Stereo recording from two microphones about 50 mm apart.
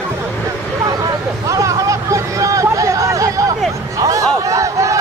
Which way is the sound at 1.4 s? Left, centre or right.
Right.